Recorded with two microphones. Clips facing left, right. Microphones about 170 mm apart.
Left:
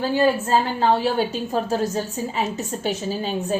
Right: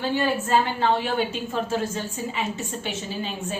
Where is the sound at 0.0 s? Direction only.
35° left (ahead or behind).